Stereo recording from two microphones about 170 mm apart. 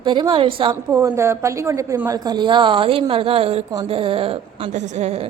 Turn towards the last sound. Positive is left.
turn(degrees=-40)  # may be behind; listen again after turning